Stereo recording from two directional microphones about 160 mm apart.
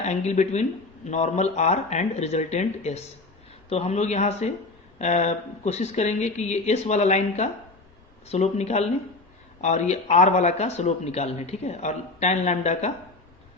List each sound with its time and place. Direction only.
0.0 s speech: 45° left (ahead or behind)